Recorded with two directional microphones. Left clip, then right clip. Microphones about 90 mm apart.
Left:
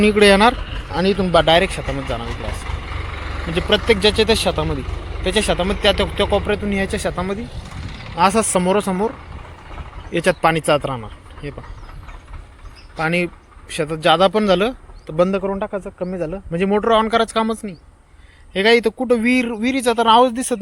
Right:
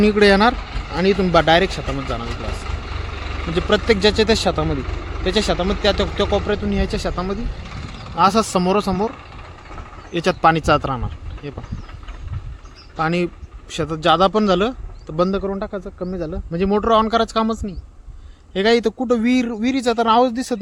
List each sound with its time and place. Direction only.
0.0 s speech: 5° right (ahead or behind)
1.3 s speech: 40° right (ahead or behind)
2.0 s speech: 15° right (ahead or behind)
3.8 s speech: 40° right (ahead or behind)
5.1 s speech: 20° right (ahead or behind)
5.8 s speech: 5° right (ahead or behind)
7.6 s vehicle: 10° left (ahead or behind)
8.2 s speech: 20° right (ahead or behind)
9.1 s vehicle: 10° left (ahead or behind)
10.1 s speech: 25° right (ahead or behind)
10.5 s speech: 40° right (ahead or behind)
13.0 s speech: 25° right (ahead or behind)
15.2 s speech: centre (ahead or behind)
16.6 s speech: 15° right (ahead or behind)